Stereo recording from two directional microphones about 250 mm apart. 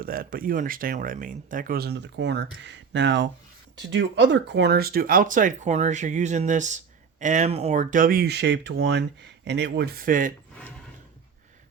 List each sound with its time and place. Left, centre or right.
0.0 s speech: right